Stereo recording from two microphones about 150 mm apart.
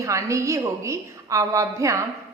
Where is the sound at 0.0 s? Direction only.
20° right (ahead or behind).